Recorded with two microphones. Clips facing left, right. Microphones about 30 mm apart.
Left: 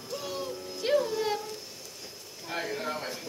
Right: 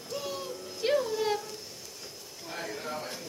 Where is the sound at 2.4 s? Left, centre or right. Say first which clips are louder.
Left 4 dB; centre.